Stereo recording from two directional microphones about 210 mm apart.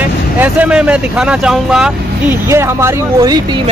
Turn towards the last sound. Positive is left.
turn(degrees=-20)  # may be behind; listen again after turning